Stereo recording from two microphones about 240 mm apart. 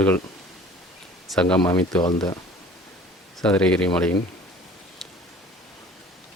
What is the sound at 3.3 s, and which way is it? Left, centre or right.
Speech, centre.